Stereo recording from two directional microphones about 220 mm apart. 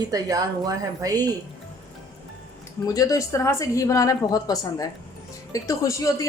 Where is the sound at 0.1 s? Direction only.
15° right (ahead or behind).